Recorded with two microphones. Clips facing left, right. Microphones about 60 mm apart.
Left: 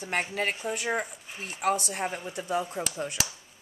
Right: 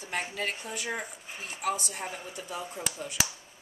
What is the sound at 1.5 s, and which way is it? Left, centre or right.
Speech, left.